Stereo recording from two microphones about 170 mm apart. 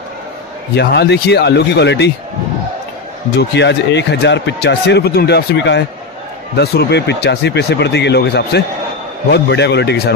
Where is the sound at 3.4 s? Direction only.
90° left.